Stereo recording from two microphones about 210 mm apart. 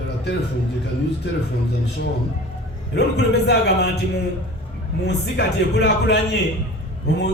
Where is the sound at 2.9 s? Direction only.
55° left (ahead or behind).